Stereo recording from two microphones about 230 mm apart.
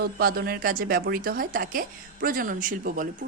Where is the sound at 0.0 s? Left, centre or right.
Right.